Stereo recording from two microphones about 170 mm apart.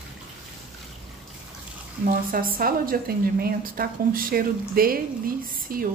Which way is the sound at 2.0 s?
60° right (ahead or behind).